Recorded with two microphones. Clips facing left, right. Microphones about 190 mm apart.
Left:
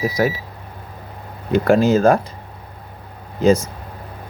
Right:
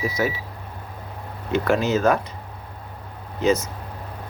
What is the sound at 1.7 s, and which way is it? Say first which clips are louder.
Speech: left 6 dB; 35° left (ahead or behind).